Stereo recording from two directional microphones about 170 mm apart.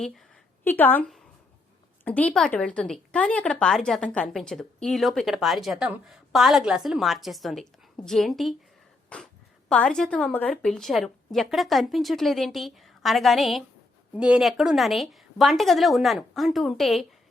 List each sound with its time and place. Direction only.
0.6 s a woman's voice: 10° left (ahead or behind)